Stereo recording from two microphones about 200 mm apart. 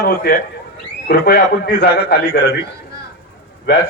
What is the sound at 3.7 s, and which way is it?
Speech, 60° left (ahead or behind).